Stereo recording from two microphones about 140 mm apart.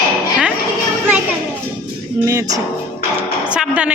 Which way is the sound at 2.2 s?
20° right (ahead or behind).